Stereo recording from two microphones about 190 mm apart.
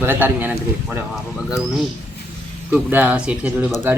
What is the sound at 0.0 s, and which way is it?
Speech, 10° right (ahead or behind).